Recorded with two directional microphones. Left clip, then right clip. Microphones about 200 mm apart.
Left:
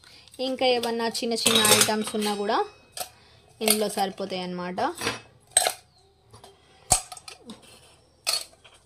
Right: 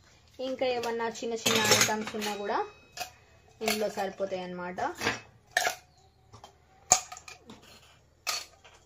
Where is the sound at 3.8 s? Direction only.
60° left (ahead or behind).